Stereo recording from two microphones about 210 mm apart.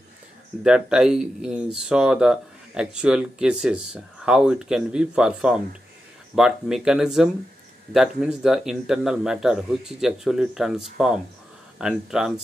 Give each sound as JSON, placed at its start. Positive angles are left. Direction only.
{"t": 0.7, "sound": "speech", "side_deg": -5}